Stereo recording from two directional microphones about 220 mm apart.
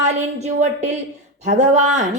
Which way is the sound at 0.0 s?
30° right (ahead or behind).